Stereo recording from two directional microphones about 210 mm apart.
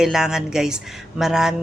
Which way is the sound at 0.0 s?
Centre (ahead or behind).